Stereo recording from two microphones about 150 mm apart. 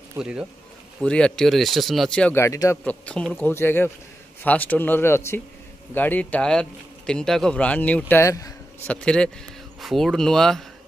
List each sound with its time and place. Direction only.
0.2 s speech: 5° right (ahead or behind)
1.0 s speech: 5° left (ahead or behind)
2.3 s speech: 20° left (ahead or behind)
2.8 s speech: 10° left (ahead or behind)
8.8 s speech: 5° left (ahead or behind)